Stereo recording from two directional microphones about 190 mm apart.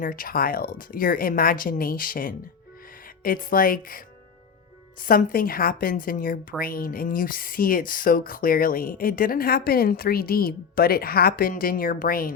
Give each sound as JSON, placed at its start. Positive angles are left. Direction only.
{"t": 0.0, "sound": "speech", "side_deg": 45}